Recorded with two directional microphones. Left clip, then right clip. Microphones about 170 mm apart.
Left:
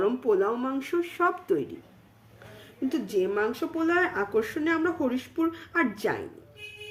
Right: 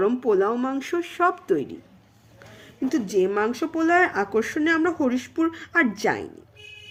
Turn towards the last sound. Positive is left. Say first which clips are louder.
# right 5 dB
turn(degrees=-40)  # may be behind; listen again after turning